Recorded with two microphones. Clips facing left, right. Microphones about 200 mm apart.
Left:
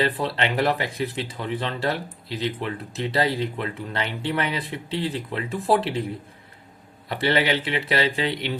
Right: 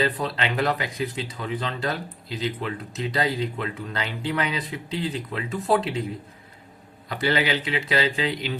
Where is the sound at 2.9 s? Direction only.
30° left (ahead or behind).